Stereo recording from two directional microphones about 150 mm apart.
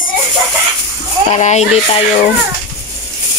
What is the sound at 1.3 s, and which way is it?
Speech, 50° left (ahead or behind).